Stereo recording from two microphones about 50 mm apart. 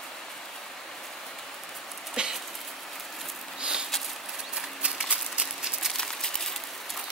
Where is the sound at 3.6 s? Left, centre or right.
Centre.